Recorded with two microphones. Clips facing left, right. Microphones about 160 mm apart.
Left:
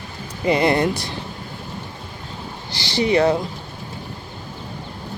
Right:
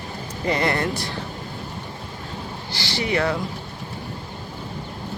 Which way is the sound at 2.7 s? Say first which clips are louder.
Left 6 dB; 20° left (ahead or behind).